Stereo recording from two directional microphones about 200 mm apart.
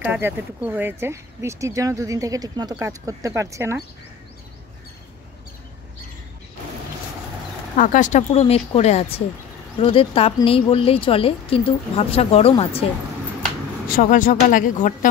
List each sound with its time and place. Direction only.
0.0 s speech: 10° right (ahead or behind)
7.7 s speech: 40° left (ahead or behind)
13.9 s speech: 40° left (ahead or behind)